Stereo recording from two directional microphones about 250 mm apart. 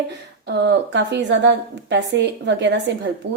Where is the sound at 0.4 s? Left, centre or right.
Right.